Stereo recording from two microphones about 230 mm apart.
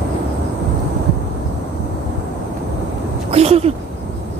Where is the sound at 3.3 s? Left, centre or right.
Right.